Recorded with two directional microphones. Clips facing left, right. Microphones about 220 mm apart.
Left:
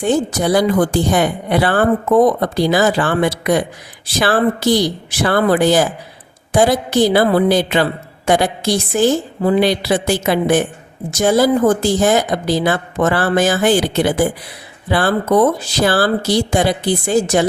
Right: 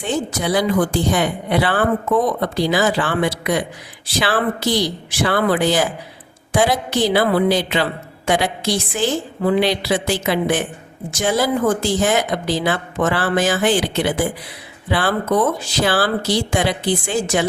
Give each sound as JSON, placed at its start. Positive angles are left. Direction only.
{"t": 0.0, "sound": "speech", "side_deg": 40}